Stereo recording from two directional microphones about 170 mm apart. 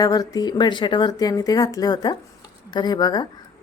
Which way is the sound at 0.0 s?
20° left (ahead or behind).